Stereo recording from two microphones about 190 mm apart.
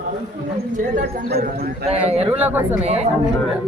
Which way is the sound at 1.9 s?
35° right (ahead or behind).